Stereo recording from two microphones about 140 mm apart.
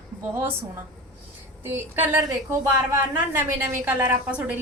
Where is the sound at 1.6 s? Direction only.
15° right (ahead or behind).